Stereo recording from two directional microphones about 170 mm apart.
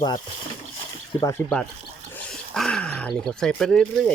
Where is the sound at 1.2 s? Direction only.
10° left (ahead or behind).